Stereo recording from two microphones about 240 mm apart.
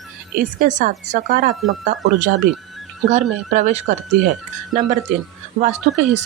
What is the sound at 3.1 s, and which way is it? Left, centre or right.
Speech, right.